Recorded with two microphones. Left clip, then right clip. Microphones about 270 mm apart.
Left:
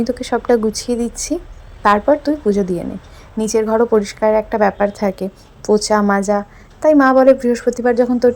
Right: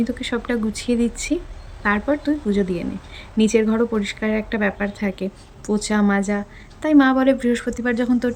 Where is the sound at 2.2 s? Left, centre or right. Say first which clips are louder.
Left 5 dB; left.